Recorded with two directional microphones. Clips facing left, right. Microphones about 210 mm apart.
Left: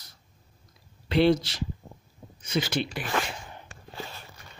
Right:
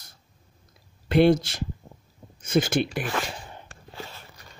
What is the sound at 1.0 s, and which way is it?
Speech, 50° right (ahead or behind).